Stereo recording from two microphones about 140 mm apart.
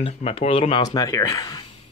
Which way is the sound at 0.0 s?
45° left (ahead or behind).